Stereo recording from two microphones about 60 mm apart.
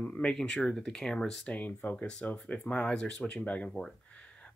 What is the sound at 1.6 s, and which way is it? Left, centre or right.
Speech, left.